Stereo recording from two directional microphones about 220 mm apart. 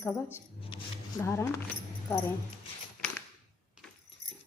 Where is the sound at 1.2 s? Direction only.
10° left (ahead or behind).